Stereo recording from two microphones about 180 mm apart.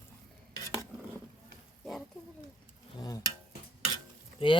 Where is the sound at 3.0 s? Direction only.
20° left (ahead or behind).